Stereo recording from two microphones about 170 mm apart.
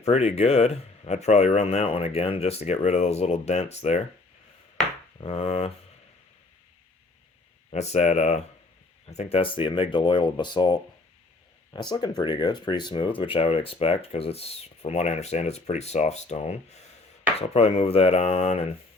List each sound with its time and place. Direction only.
0.0 s speech: 40° left (ahead or behind)
5.2 s speech: 35° left (ahead or behind)
7.7 s speech: 40° left (ahead or behind)